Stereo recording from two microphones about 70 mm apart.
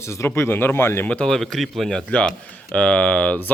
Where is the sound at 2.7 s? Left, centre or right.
Centre.